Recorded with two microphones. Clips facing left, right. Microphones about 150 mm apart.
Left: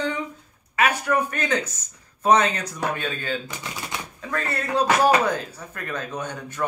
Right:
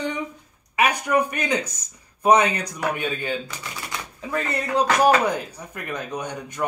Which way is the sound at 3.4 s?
20° left (ahead or behind).